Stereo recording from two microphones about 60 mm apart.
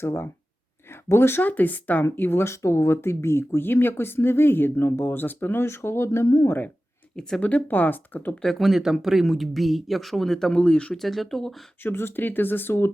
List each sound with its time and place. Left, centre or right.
0.0 s speech: left
2.5 s speech: left
5.6 s speech: left
6.2 s speech: left
7.2 s speech: centre
7.4 s speech: left
8.4 s speech: centre
11.8 s speech: left